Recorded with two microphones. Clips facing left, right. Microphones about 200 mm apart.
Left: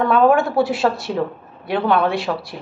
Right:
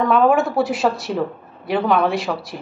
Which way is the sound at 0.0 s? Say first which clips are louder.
Left 1 dB; centre (ahead or behind).